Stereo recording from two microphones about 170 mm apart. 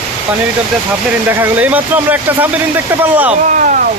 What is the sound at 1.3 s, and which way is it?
A man's voice, 10° right (ahead or behind).